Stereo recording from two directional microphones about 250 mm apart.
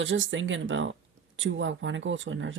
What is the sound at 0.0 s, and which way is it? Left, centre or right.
Speech, right.